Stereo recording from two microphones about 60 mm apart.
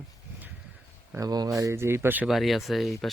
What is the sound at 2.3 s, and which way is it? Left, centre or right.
Speech, centre.